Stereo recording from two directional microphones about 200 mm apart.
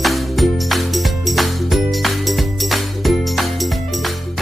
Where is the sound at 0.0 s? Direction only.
Centre (ahead or behind).